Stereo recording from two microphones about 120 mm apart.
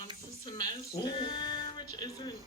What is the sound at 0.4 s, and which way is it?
Speech, 40° left (ahead or behind).